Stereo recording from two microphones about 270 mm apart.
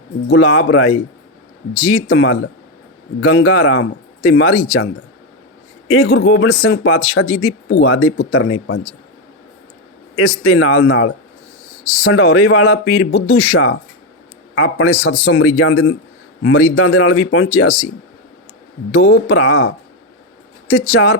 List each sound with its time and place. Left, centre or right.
0.3 s speech: left
5.9 s speech: left
10.2 s a man's voice: left
18.9 s speech: left
20.9 s speech: left